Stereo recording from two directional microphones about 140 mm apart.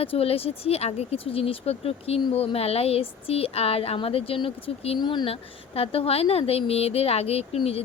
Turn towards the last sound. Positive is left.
turn(degrees=45)  # may be behind; listen again after turning